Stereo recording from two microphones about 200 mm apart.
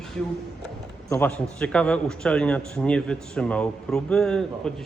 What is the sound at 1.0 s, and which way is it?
A man's voice, 5° left (ahead or behind).